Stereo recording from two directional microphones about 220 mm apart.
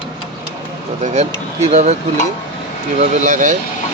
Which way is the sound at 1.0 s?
30° right (ahead or behind).